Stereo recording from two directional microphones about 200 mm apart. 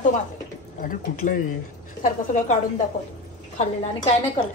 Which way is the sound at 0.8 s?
40° left (ahead or behind).